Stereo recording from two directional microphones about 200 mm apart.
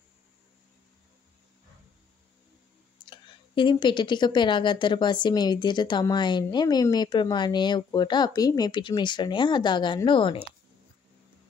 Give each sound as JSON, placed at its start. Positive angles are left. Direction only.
{"t": 3.1, "sound": "a woman's voice", "side_deg": 25}